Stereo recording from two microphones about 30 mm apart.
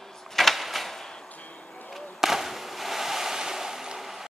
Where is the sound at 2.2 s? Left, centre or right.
Centre.